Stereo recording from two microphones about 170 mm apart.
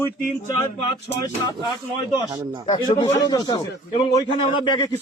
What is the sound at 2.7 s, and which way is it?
A man's voice, 25° left (ahead or behind).